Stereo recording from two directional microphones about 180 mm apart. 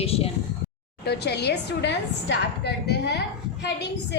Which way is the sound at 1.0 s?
65° left (ahead or behind).